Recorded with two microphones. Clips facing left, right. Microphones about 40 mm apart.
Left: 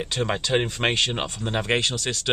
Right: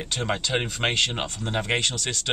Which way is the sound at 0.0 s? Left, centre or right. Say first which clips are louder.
Left 2 dB; centre.